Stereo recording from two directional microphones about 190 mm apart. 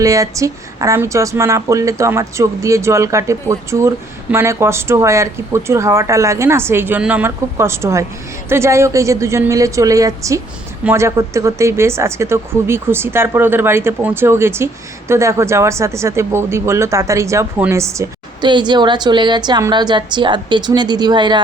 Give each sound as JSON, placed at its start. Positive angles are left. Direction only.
{"t": 0.0, "sound": "a woman's voice", "side_deg": -15}